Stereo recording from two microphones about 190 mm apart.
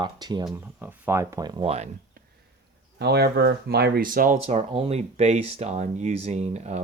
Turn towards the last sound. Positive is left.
turn(degrees=-35)  # may be behind; listen again after turning